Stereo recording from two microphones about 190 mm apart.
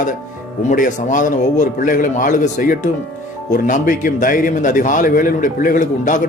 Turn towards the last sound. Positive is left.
turn(degrees=45)  # may be behind; listen again after turning